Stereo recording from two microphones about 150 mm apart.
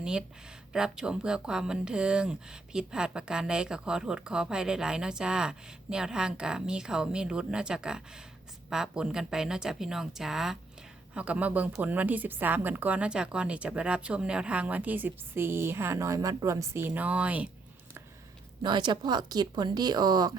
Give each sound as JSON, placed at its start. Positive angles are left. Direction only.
{"t": 0.0, "sound": "speech", "side_deg": -5}
{"t": 18.6, "sound": "speech", "side_deg": -30}